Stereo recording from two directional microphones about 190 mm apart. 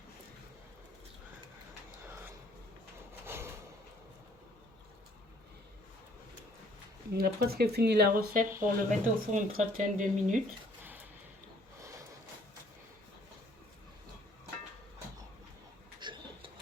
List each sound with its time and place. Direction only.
2.0 s a sound: 10° right (ahead or behind)
7.1 s speech: 55° right (ahead or behind)
16.0 s pigeon: 25° right (ahead or behind)